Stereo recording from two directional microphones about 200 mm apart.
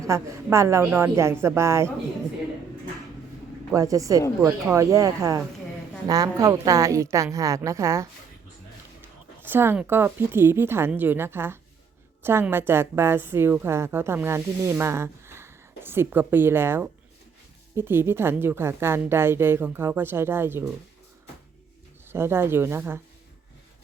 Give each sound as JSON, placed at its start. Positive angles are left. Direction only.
{"t": 0.0, "sound": "a woman's voice", "side_deg": -15}
{"t": 3.8, "sound": "a woman's voice", "side_deg": -15}
{"t": 22.1, "sound": "a woman's voice", "side_deg": -10}